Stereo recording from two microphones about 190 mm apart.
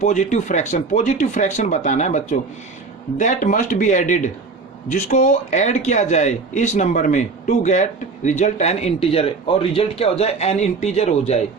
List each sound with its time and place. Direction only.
0.0 s speech: 40° left (ahead or behind)